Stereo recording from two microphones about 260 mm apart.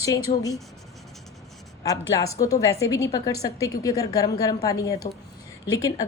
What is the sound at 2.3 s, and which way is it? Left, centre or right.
A woman's voice, centre.